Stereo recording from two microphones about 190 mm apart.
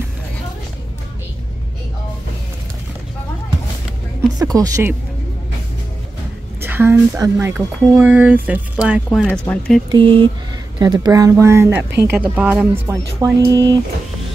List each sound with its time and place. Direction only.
4.4 s speech: 20° right (ahead or behind)
6.6 s speech: 10° right (ahead or behind); by 9.8 s 5° left (ahead or behind)
9.8 s speech: 25° right (ahead or behind); by 12.6 s 10° right (ahead or behind)
12.7 s speech: 20° right (ahead or behind)